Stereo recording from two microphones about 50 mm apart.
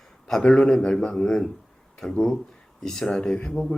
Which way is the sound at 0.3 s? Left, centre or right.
Centre.